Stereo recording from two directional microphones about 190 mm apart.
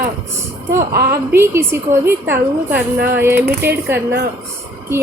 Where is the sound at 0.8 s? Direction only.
55° right (ahead or behind).